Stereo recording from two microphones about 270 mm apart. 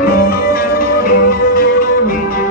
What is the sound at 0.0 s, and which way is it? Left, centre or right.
Music, left.